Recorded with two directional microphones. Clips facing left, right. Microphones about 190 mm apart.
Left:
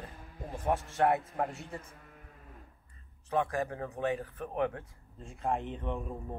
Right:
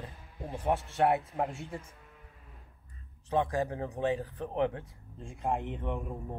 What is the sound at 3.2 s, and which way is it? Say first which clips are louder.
Speech: right 2 dB; 20° right (ahead or behind).